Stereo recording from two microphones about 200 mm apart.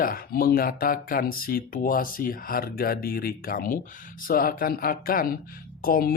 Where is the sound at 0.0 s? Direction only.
45° left (ahead or behind).